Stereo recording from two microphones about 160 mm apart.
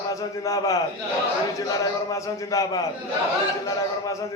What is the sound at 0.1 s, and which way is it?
Speech, 20° left (ahead or behind).